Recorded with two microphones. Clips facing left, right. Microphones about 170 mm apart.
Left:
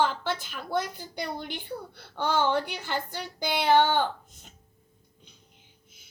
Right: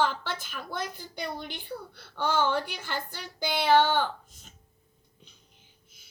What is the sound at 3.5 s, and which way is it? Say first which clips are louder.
Speech: even; 15° left (ahead or behind).